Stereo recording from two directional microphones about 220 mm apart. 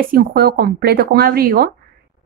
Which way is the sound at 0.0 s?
40° right (ahead or behind).